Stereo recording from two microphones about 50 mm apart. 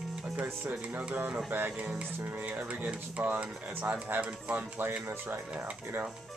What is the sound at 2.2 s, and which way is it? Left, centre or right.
Speech, right.